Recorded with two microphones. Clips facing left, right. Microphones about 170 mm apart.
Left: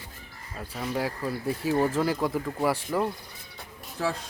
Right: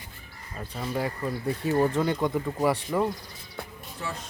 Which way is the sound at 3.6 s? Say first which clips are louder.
Right 8 dB; 55° right (ahead or behind).